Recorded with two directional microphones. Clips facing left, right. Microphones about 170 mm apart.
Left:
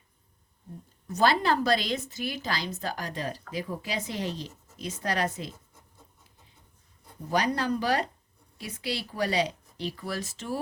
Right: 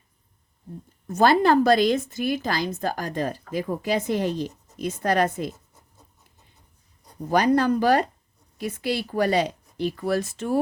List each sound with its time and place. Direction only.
1.0 s speech: 50° right (ahead or behind)
7.3 s speech: 50° right (ahead or behind)